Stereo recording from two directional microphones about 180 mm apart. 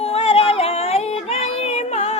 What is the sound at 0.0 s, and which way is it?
Yodeling, 35° left (ahead or behind).